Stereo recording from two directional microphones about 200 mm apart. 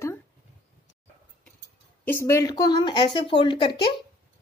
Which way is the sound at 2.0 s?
15° left (ahead or behind).